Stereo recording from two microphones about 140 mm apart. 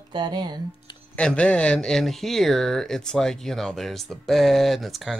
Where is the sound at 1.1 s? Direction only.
10° left (ahead or behind).